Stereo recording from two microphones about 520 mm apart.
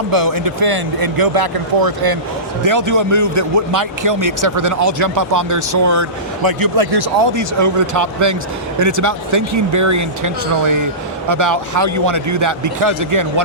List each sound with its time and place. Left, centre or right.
0.1 s speech: right